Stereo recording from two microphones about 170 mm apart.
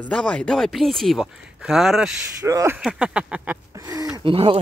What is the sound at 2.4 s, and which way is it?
Speech, 20° right (ahead or behind).